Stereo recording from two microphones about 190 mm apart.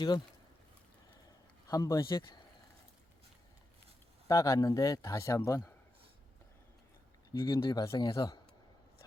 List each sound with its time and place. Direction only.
1.6 s speech: 20° left (ahead or behind)
4.3 s speech: 15° left (ahead or behind)
7.3 s speech: 15° left (ahead or behind)